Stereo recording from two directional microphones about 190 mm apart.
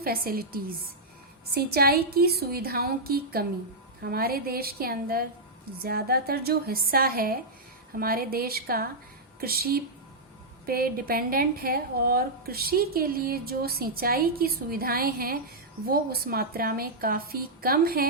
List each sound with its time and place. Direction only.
0.0 s a woman's voice: 50° right (ahead or behind)